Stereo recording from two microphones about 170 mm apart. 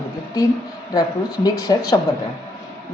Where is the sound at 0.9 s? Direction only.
20° left (ahead or behind).